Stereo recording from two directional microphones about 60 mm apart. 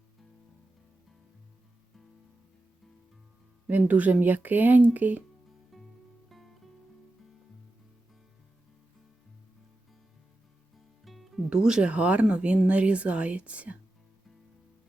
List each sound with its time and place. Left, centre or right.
3.7 s speech: right
5.7 s music: centre
11.0 s music: centre
11.4 s speech: centre